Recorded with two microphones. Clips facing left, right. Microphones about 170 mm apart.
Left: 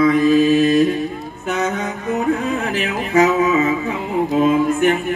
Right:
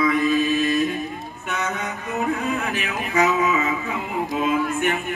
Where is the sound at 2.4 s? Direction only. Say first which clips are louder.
Left 4 dB; 35° left (ahead or behind).